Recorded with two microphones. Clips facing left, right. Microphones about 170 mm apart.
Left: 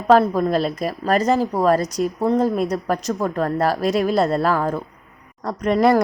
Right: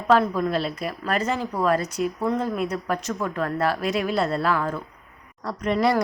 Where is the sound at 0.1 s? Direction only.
40° left (ahead or behind).